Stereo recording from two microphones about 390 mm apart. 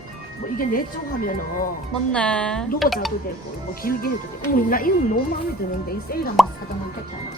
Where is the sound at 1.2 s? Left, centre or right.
Left.